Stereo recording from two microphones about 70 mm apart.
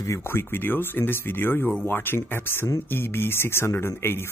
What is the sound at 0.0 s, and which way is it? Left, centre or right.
Speech, left.